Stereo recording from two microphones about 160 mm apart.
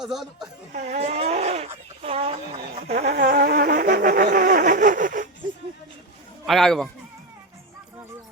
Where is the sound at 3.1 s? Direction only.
90° right; by 5.2 s 55° right (ahead or behind).